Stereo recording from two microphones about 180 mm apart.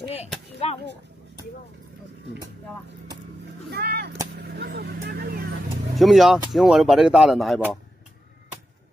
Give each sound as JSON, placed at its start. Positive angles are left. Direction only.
{"t": 3.7, "sound": "a sound", "side_deg": -60}
{"t": 4.4, "sound": "vehicle", "side_deg": -65}
{"t": 5.9, "sound": "speech", "side_deg": 0}